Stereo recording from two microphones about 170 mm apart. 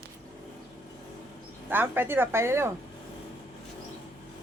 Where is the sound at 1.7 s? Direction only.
10° right (ahead or behind).